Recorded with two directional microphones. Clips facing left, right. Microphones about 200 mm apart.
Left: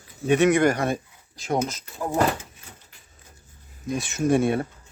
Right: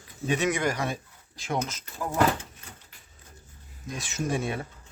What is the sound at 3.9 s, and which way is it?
Speech, 55° left (ahead or behind).